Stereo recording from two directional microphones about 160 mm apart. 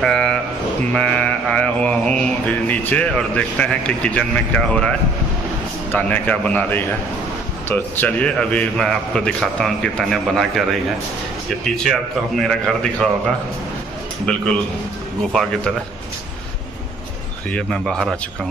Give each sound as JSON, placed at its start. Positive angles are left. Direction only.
{"t": 0.0, "sound": "sheep", "side_deg": 5}
{"t": 0.9, "sound": "mantra", "side_deg": 5}
{"t": 7.6, "sound": "a man's voice", "side_deg": 10}
{"t": 14.2, "sound": "a man's voice", "side_deg": 5}
{"t": 17.5, "sound": "a man's voice", "side_deg": 5}